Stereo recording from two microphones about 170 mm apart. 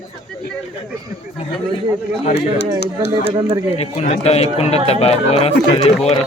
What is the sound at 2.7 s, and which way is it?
Speech, 75° left (ahead or behind).